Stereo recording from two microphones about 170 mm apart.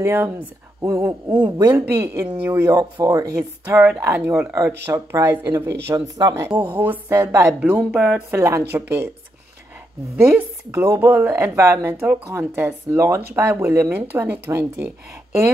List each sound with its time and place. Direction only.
0.0 s speech: 15° right (ahead or behind)
2.0 s speech: 15° right (ahead or behind)
3.6 s speech: 10° right (ahead or behind)
8.3 s speech: 15° right (ahead or behind)
10.1 s speech: 15° right (ahead or behind)